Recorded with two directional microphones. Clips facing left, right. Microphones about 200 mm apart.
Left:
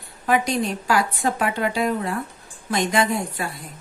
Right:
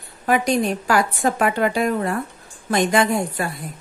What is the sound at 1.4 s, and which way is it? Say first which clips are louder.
Speech: right 4 dB; 50° right (ahead or behind).